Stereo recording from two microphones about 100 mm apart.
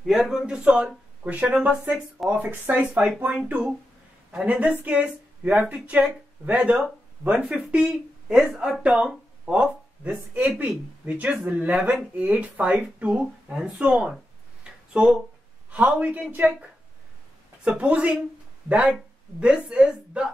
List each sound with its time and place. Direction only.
0.0 s speech: 5° right (ahead or behind)
1.7 s speech: centre (ahead or behind)
2.5 s speech: 20° right (ahead or behind)
17.6 s speech: 15° right (ahead or behind)